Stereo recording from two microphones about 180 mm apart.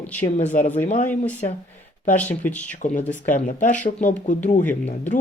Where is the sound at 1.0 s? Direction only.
10° left (ahead or behind).